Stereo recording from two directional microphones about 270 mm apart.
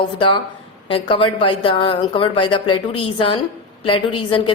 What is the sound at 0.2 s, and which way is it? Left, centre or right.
A woman's voice, centre.